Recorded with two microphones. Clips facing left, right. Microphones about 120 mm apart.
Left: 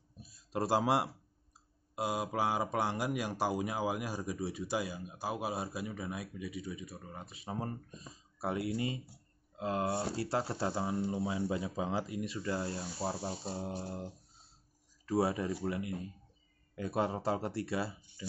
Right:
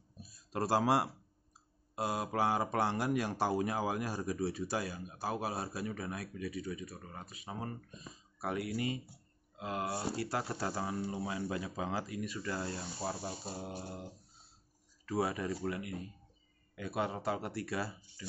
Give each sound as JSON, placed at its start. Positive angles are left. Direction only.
{"t": 0.2, "sound": "a sound", "side_deg": 20}
{"t": 2.0, "sound": "speech", "side_deg": 10}
{"t": 7.2, "sound": "speech", "side_deg": 30}
{"t": 15.0, "sound": "speech", "side_deg": 25}